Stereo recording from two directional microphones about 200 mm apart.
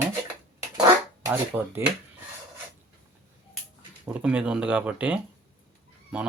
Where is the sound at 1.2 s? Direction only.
10° right (ahead or behind).